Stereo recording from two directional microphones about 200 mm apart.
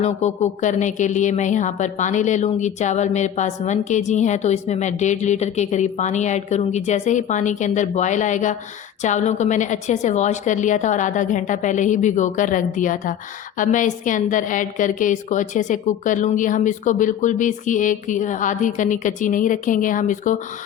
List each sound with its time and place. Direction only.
0.0 s a woman's voice: 35° left (ahead or behind)